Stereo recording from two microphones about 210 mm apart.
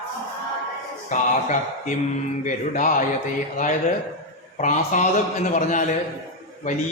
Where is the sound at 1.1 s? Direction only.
35° left (ahead or behind).